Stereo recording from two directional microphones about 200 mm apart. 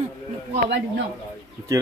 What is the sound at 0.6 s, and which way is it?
Speech, 60° right (ahead or behind).